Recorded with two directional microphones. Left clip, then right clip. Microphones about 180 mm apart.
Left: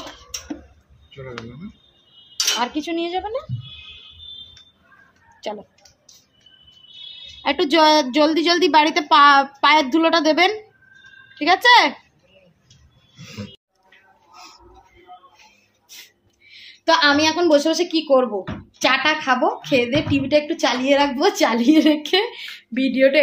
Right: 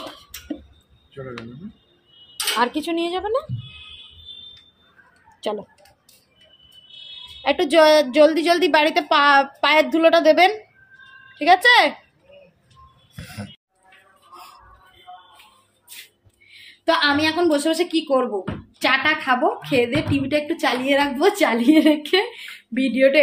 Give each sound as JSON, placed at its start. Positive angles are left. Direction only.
{"t": 2.6, "sound": "speech", "side_deg": -30}
{"t": 7.4, "sound": "a woman's voice", "side_deg": 0}
{"t": 16.4, "sound": "a woman's voice", "side_deg": 15}